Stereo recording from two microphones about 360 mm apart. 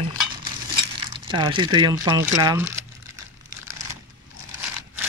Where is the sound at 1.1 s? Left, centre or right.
Centre.